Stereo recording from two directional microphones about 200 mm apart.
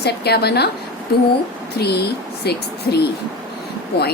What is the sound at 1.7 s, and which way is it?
Speech, 55° left (ahead or behind).